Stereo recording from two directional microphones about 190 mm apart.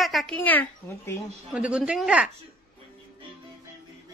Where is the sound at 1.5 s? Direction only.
5° right (ahead or behind).